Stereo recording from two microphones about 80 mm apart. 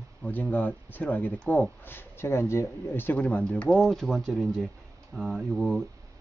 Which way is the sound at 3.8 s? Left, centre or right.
Centre.